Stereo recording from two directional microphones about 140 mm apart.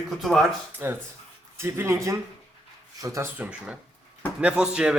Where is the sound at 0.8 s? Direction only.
15° right (ahead or behind).